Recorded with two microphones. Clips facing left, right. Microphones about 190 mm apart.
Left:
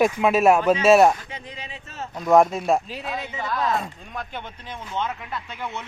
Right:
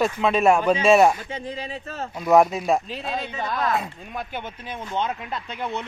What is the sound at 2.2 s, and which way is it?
Speech, 5° right (ahead or behind).